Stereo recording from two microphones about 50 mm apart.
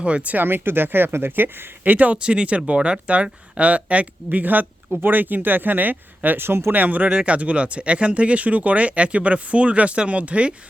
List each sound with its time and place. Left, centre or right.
0.0 s speech: right
0.4 s speech: right
2.1 s speech: centre